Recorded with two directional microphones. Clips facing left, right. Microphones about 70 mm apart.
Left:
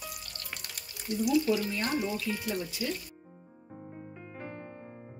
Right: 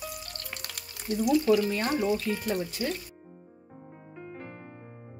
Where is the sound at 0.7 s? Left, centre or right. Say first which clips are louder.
Right 3 dB; right.